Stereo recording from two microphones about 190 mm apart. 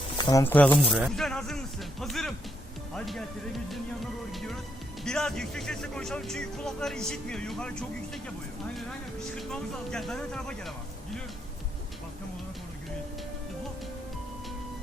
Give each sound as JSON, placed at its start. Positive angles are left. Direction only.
{"t": 0.2, "sound": "speech", "side_deg": 20}
{"t": 0.4, "sound": "speech", "side_deg": 10}
{"t": 0.9, "sound": "music", "side_deg": 0}
{"t": 2.9, "sound": "speech", "side_deg": 0}
{"t": 9.3, "sound": "speech", "side_deg": 5}